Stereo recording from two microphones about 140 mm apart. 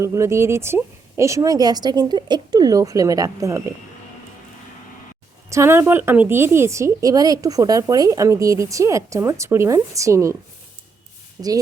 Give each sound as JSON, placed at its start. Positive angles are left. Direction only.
{"t": 0.0, "sound": "a woman's voice", "side_deg": -20}
{"t": 5.5, "sound": "a woman's voice", "side_deg": -20}
{"t": 11.4, "sound": "a woman's voice", "side_deg": -30}